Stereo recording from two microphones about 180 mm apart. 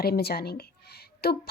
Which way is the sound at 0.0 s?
60° left (ahead or behind).